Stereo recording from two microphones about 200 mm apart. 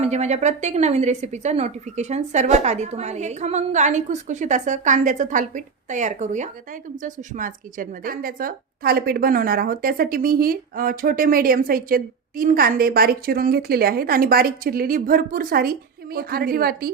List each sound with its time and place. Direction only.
0.0 s a woman's voice: 35° right (ahead or behind)